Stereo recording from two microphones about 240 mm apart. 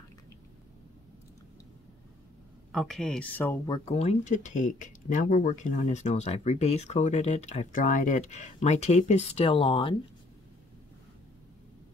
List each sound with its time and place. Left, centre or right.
2.7 s speech: centre; by 9.9 s left